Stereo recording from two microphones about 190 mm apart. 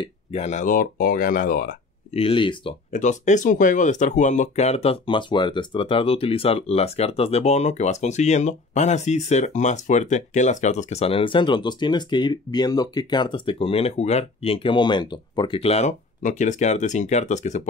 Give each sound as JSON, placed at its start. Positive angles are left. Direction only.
{"t": 0.0, "sound": "speech", "side_deg": 35}
{"t": 2.1, "sound": "speech", "side_deg": 30}
{"t": 2.9, "sound": "speech", "side_deg": 40}